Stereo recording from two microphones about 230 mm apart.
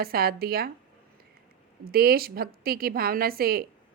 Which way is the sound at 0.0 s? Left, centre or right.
Right.